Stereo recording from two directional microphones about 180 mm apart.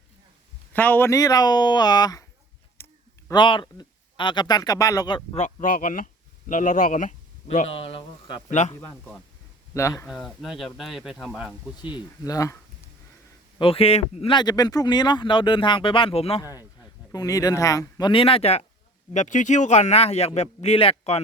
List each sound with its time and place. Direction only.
0.7 s speech: 10° left (ahead or behind)
2.8 s a sound: 15° left (ahead or behind)
3.2 s speech: 25° left (ahead or behind)
5.4 s speech: 50° left (ahead or behind)
7.5 s speech: 35° left (ahead or behind)
8.7 s speech: 15° left (ahead or behind)
10.1 s speech: centre (ahead or behind)
11.8 s speech: 25° left (ahead or behind)
13.6 s speech: 30° left (ahead or behind)
17.1 s speech: 20° left (ahead or behind)